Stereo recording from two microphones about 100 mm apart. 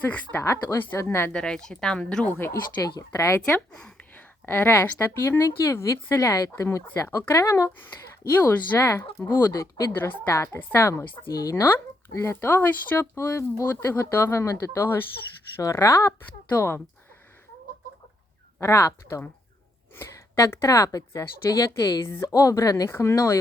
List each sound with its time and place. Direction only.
0.0 s speech: 15° left (ahead or behind)
0.4 s speech: 30° left (ahead or behind)
1.3 s speech: 5° left (ahead or behind)
2.4 s speech: 30° left (ahead or behind)
3.7 s a sound: 10° left (ahead or behind)
4.4 s speech: 20° left (ahead or behind)
9.5 s speech: 35° left (ahead or behind)
12.1 s speech: 25° left (ahead or behind)
18.6 s speech: 25° left (ahead or behind)